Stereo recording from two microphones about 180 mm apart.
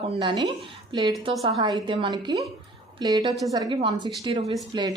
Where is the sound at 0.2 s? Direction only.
25° right (ahead or behind).